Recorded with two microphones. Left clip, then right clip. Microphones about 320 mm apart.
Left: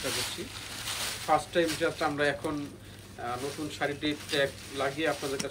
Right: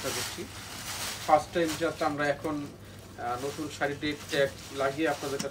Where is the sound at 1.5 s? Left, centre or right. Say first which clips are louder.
Left 1 dB; centre.